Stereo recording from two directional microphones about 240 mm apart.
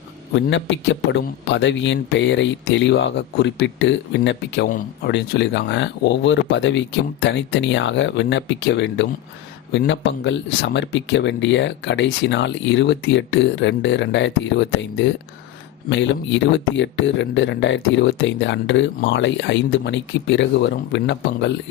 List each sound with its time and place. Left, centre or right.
0.3 s speech: left